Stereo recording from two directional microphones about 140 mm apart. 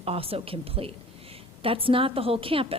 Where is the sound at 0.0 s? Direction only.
45° right (ahead or behind).